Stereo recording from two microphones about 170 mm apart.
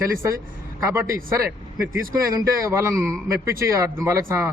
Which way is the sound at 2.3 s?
20° right (ahead or behind).